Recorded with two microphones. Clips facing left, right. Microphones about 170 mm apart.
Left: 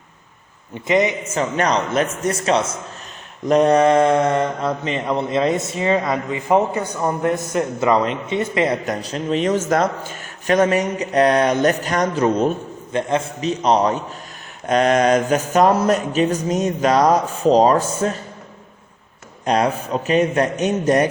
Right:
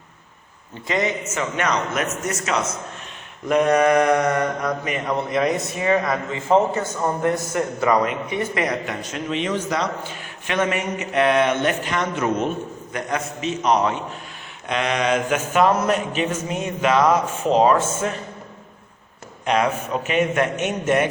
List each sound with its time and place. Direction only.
0.7 s mantra: 20° left (ahead or behind)
1.2 s a man's voice: 35° left (ahead or behind)
3.4 s mantra: 35° left (ahead or behind)
8.8 s a man's voice: 40° left (ahead or behind)
19.5 s a man's voice: 35° left (ahead or behind)